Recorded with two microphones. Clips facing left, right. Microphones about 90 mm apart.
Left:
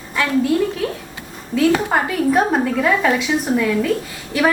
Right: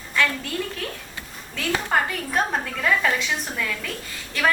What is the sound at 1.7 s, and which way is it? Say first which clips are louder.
A woman's voice: left 5 dB; 15° left (ahead or behind).